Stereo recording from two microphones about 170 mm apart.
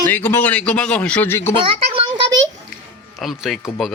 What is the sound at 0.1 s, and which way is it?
A man's voice, 10° left (ahead or behind).